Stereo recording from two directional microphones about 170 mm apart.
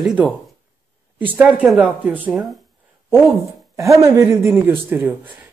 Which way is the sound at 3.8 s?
20° right (ahead or behind).